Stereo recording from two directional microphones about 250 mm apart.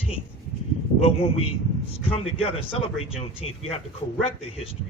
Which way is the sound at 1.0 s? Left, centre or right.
Left.